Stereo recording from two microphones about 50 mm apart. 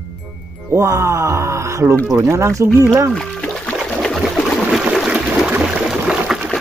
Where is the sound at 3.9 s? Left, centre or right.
Centre.